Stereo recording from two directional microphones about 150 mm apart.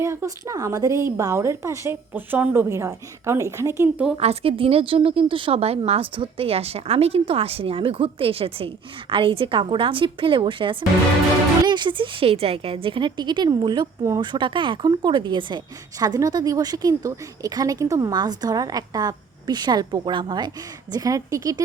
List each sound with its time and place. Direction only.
0.0 s a woman's voice: 20° right (ahead or behind)
4.2 s a woman's voice: 40° right (ahead or behind); by 21.6 s 25° right (ahead or behind)